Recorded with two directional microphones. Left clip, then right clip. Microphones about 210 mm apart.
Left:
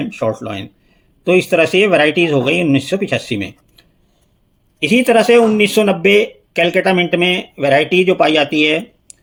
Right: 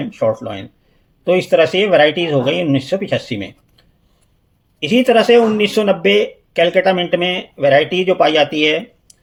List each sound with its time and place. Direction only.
0.0 s speech: 25° left (ahead or behind)